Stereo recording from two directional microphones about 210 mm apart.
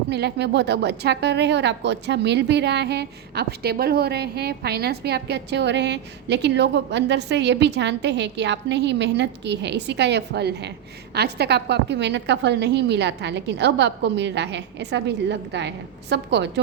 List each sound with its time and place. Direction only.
0.1 s a woman's voice: 55° right (ahead or behind)